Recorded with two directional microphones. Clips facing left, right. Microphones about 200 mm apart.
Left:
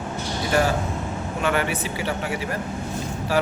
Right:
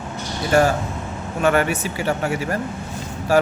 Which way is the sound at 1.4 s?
45° right (ahead or behind).